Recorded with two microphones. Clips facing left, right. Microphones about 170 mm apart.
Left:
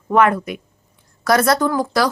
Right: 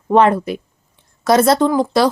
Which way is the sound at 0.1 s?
30° right (ahead or behind).